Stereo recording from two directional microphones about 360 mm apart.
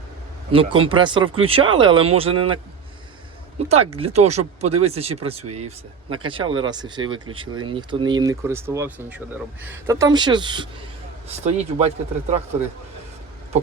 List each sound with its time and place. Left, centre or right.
0.5 s speech: centre
3.7 s speech: centre